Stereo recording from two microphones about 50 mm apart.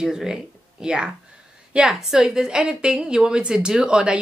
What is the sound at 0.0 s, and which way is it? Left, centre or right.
A woman's voice, centre.